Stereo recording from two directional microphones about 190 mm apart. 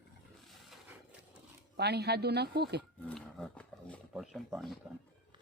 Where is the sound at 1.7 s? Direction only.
60° right (ahead or behind).